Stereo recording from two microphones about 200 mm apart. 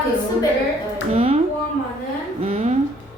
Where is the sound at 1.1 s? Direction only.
30° right (ahead or behind).